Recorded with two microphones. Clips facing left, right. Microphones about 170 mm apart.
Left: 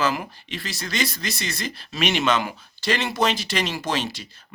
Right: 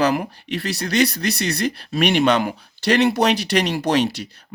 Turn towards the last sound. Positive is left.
turn(degrees=-65)  # may be behind; listen again after turning